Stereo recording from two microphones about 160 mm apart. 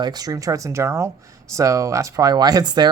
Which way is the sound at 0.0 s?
25° right (ahead or behind).